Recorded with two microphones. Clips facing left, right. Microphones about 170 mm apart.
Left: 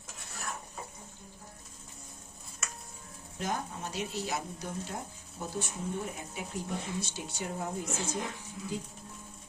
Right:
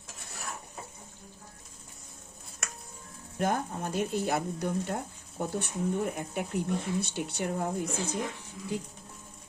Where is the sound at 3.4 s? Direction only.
55° right (ahead or behind).